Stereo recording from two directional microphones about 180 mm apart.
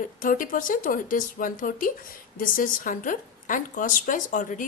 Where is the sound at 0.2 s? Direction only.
50° left (ahead or behind).